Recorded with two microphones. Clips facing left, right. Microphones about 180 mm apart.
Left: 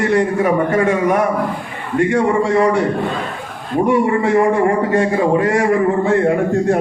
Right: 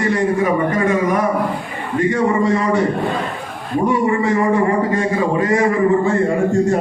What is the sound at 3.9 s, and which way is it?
Speech, 70° left (ahead or behind).